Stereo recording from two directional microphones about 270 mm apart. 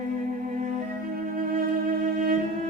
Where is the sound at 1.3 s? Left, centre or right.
Right.